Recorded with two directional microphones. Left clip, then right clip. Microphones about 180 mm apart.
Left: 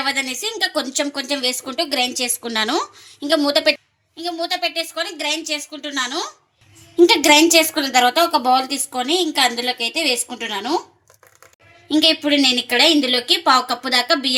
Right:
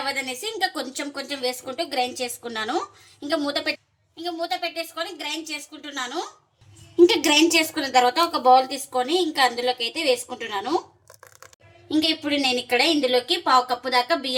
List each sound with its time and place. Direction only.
0.0 s a woman's voice: 45° left (ahead or behind)
11.9 s a woman's voice: 45° left (ahead or behind)